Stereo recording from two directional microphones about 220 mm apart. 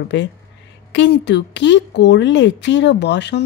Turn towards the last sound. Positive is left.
turn(degrees=50)  # may be behind; listen again after turning